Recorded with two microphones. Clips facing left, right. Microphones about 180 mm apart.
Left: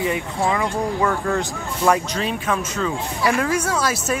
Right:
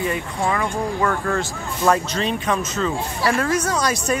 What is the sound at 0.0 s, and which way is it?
Speech, 15° left (ahead or behind).